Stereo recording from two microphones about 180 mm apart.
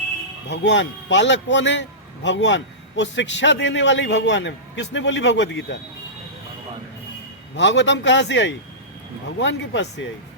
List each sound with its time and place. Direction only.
0.5 s a man's voice: 80° left
7.5 s a man's voice: 85° left